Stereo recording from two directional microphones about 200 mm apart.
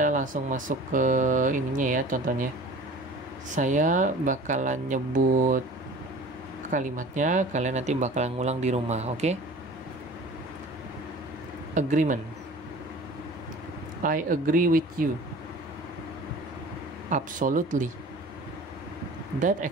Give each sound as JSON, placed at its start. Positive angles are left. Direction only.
{"t": 0.0, "sound": "speech", "side_deg": -40}
{"t": 3.5, "sound": "speech", "side_deg": -40}
{"t": 6.7, "sound": "speech", "side_deg": -40}
{"t": 11.7, "sound": "speech", "side_deg": -40}
{"t": 14.0, "sound": "speech", "side_deg": -45}
{"t": 17.1, "sound": "speech", "side_deg": -40}